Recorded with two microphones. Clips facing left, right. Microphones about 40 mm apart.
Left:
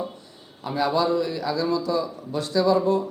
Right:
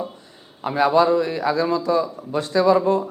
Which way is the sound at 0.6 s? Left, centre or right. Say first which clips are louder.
Right 6 dB; right.